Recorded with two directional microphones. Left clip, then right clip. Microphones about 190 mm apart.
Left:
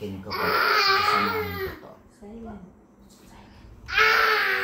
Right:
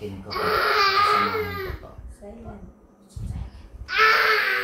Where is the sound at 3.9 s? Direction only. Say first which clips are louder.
Right 1 dB; 15° right (ahead or behind).